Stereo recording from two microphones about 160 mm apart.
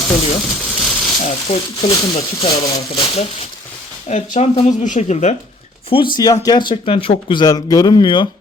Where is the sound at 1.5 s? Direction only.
35° left (ahead or behind).